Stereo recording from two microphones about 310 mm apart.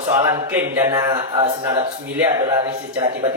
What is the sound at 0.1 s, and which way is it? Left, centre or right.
A man's voice, centre.